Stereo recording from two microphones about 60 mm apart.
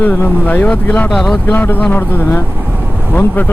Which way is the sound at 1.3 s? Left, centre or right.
Left.